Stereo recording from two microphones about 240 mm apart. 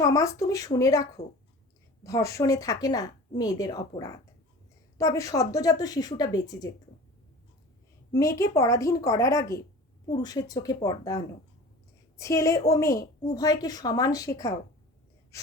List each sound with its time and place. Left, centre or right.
0.0 s a woman's voice: centre
8.1 s a woman's voice: centre